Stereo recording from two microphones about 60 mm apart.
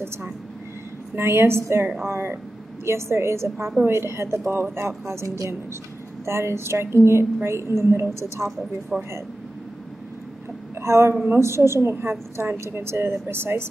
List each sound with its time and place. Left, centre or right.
1.1 s a woman's voice: right
2.8 s a woman's voice: right
8.9 s speech: centre
10.8 s a woman's voice: right